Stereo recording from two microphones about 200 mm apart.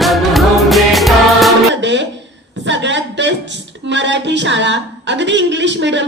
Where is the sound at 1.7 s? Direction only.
60° right (ahead or behind).